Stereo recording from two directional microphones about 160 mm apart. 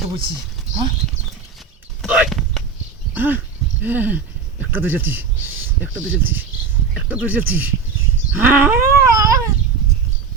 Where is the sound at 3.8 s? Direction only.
10° right (ahead or behind).